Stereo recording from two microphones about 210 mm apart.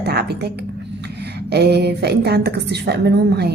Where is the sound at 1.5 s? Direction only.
50° right (ahead or behind).